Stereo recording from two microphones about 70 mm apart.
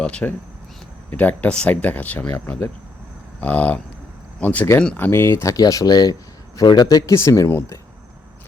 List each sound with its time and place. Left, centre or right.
0.0 s speech: centre; by 5.5 s left
5.5 s speech: left
7.0 s speech: left